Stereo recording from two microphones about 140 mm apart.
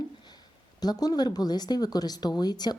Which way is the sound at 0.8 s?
30° left (ahead or behind).